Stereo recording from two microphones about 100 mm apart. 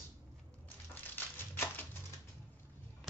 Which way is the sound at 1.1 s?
20° left (ahead or behind).